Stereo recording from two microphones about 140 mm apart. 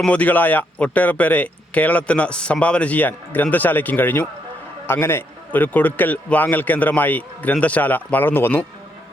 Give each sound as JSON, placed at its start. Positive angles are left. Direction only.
{"t": 0.0, "sound": "speech", "side_deg": 10}